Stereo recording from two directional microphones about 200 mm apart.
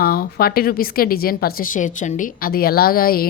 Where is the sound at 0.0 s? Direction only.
50° left (ahead or behind).